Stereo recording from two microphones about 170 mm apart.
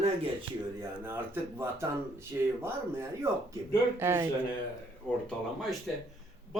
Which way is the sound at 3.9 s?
15° right (ahead or behind).